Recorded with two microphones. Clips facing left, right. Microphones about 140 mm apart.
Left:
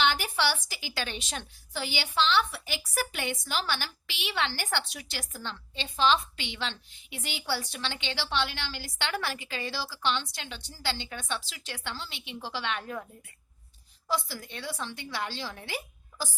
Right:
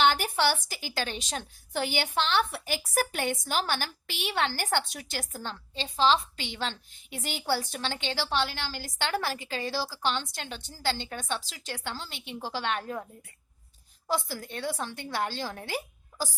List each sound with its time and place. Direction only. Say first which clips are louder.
0.0 s a woman's voice: right 3 dB; 45° right (ahead or behind)
1.7 s a woman's voice: right 3 dB; 55° right (ahead or behind); by 13.1 s 35° right (ahead or behind)
14.1 s a woman's voice: right 1 dB; 50° right (ahead or behind)